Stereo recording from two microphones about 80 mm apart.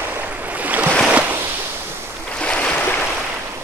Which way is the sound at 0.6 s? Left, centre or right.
Centre.